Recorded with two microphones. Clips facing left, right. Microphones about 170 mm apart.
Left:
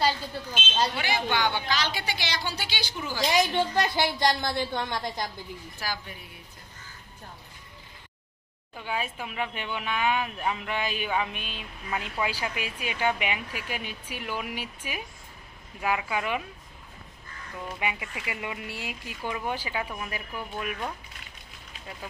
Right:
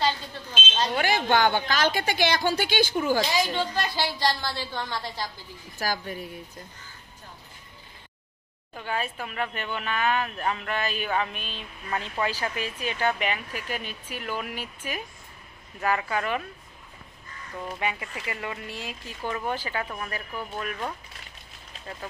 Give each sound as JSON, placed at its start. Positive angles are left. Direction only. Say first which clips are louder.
{"t": 0.9, "sound": "a woman's voice", "louder": "right 5 dB", "side_deg": -50}
{"t": 3.3, "sound": "a woman's voice", "louder": "left 2 dB", "side_deg": 20}
{"t": 5.8, "sound": "a woman's voice", "louder": "right 7 dB", "side_deg": -40}
{"t": 8.7, "sound": "speech", "louder": "right 1 dB", "side_deg": 10}
{"t": 17.7, "sound": "speech", "louder": "right 1 dB", "side_deg": 15}